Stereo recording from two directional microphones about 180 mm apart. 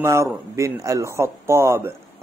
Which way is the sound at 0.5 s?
15° right (ahead or behind).